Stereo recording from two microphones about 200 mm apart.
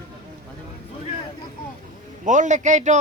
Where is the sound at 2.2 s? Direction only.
40° right (ahead or behind).